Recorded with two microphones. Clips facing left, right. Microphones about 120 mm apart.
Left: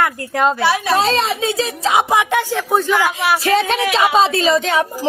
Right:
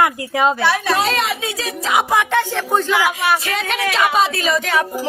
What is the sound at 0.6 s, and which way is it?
Speech, 10° left (ahead or behind).